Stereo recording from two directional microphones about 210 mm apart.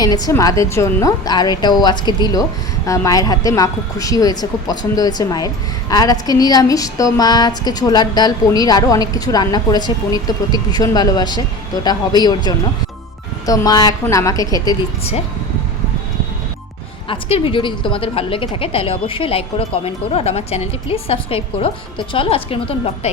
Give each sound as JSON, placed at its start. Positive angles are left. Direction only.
{"t": 0.0, "sound": "a woman's voice", "side_deg": 15}
{"t": 17.1, "sound": "a woman's voice", "side_deg": 25}